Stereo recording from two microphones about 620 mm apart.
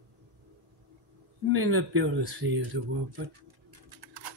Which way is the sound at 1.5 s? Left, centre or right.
Centre.